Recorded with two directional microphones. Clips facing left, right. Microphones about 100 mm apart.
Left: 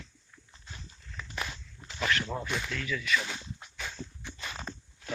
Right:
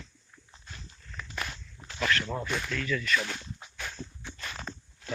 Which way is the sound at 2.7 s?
10° left (ahead or behind).